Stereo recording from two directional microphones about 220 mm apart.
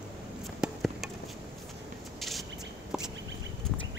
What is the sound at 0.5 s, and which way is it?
Chop, centre (ahead or behind).